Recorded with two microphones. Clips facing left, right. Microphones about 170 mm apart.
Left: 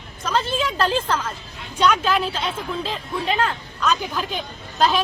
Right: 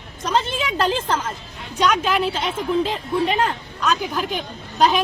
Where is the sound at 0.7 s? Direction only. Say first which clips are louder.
Right 3 dB; 20° right (ahead or behind).